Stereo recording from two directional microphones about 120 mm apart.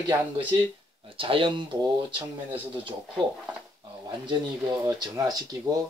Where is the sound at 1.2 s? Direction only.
45° right (ahead or behind).